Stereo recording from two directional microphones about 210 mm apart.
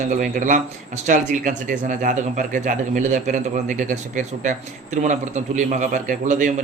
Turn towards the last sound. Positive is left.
turn(degrees=-40)  # may be behind; listen again after turning